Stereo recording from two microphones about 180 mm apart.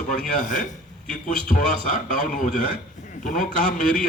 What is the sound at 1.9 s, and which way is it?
A man's voice, 45° left (ahead or behind).